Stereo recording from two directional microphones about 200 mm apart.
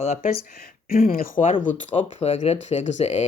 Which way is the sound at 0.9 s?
45° left (ahead or behind).